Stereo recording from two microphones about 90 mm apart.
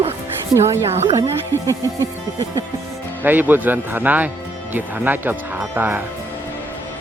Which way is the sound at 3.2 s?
20° right (ahead or behind).